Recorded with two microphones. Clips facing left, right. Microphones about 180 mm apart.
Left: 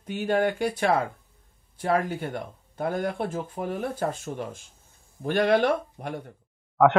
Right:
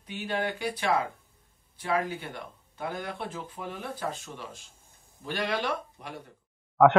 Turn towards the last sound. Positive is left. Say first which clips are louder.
# even
turn(degrees=0)  # may be behind; listen again after turning